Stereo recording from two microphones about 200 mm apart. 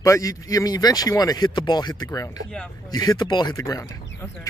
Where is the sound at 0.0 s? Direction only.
15° left (ahead or behind).